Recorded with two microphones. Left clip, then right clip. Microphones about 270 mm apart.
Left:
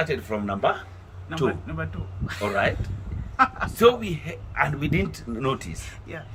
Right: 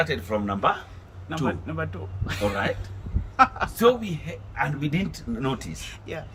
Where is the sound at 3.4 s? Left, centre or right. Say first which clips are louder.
Right 2 dB; right.